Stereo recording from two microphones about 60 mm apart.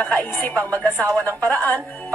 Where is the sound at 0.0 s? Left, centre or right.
Left.